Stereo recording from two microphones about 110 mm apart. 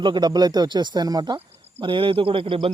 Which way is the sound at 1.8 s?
50° right (ahead or behind).